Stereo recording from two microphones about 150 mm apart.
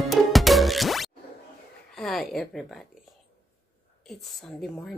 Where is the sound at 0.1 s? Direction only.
Centre (ahead or behind).